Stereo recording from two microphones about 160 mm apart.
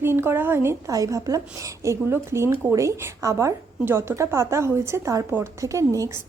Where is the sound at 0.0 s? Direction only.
15° right (ahead or behind).